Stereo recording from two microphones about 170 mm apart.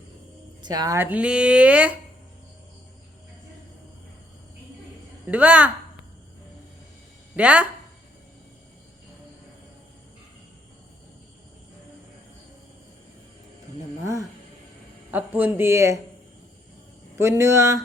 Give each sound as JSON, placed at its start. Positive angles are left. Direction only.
{"t": 0.6, "sound": "speech", "side_deg": -25}
{"t": 1.1, "sound": "speech", "side_deg": -5}
{"t": 5.3, "sound": "speech", "side_deg": -10}
{"t": 7.3, "sound": "speech", "side_deg": -5}
{"t": 14.0, "sound": "speech", "side_deg": -20}
{"t": 17.2, "sound": "speech", "side_deg": -15}